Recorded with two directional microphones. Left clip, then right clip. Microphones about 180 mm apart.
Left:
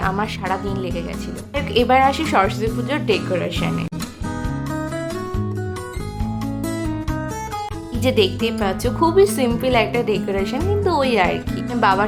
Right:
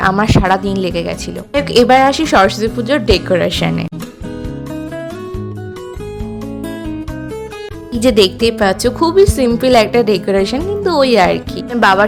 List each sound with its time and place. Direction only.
0.1 s a woman's voice: 40° right (ahead or behind)
8.0 s a woman's voice: 35° right (ahead or behind)